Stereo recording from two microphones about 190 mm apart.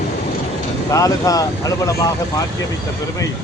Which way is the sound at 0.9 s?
15° left (ahead or behind).